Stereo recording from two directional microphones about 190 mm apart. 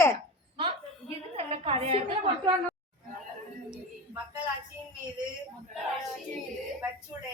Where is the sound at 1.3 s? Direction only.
30° right (ahead or behind).